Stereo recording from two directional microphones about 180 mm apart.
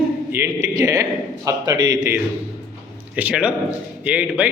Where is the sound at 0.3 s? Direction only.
20° right (ahead or behind).